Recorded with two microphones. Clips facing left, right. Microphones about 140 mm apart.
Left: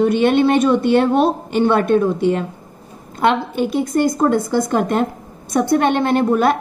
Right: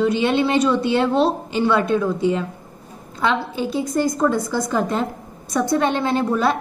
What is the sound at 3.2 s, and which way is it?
A woman's voice, 60° left (ahead or behind).